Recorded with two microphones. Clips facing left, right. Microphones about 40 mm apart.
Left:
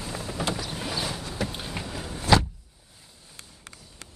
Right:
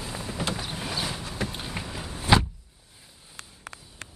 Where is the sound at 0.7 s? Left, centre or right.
Centre.